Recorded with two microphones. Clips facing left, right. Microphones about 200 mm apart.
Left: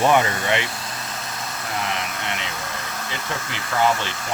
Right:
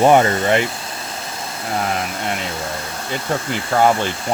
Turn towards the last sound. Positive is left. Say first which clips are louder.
# right 5 dB
turn(degrees=-50)  # may be behind; listen again after turning